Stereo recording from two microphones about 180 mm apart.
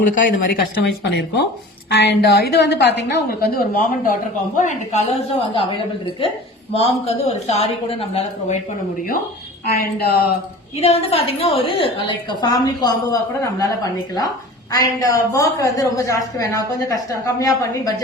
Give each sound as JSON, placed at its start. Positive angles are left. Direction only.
{"t": 0.0, "sound": "speech", "side_deg": 50}
{"t": 1.1, "sound": "a woman's voice", "side_deg": 70}
{"t": 9.6, "sound": "a woman's voice", "side_deg": 55}
{"t": 10.8, "sound": "a woman's voice", "side_deg": 35}
{"t": 12.4, "sound": "a woman's voice", "side_deg": 20}
{"t": 14.7, "sound": "a woman's voice", "side_deg": 20}